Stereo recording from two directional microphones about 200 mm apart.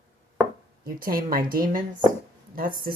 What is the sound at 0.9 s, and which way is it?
Speech, 45° right (ahead or behind).